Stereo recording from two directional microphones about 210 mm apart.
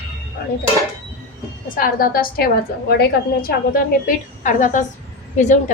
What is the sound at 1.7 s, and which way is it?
A woman's voice, 40° left (ahead or behind).